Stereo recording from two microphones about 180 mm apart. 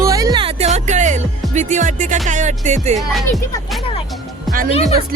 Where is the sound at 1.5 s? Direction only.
40° right (ahead or behind).